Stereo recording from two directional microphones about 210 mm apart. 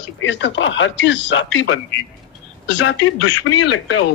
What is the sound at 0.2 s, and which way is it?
A man's voice, 60° left (ahead or behind).